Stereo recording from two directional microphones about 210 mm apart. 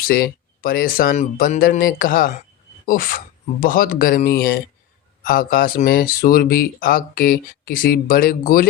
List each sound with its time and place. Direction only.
0.0 s speech: 45° left (ahead or behind)